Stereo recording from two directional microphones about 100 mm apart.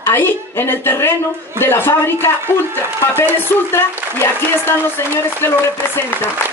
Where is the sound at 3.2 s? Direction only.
20° left (ahead or behind).